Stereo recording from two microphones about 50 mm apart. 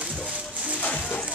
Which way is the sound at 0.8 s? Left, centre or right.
Left.